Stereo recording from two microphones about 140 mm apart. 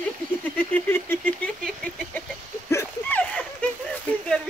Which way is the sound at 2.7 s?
15° left (ahead or behind).